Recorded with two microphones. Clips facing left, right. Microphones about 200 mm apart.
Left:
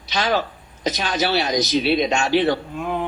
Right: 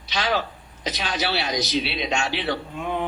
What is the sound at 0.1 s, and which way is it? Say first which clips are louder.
A man's voice: left 3 dB; 45° left (ahead or behind).